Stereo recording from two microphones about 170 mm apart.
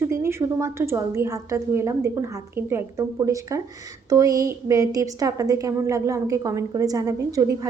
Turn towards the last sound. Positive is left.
turn(degrees=-20)  # may be behind; listen again after turning